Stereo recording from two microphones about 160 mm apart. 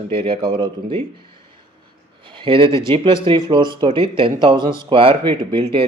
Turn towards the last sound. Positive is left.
turn(degrees=-35)  # may be behind; listen again after turning